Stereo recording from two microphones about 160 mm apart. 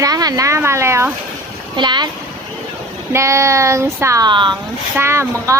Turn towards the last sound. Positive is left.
turn(degrees=-20)  # may be behind; listen again after turning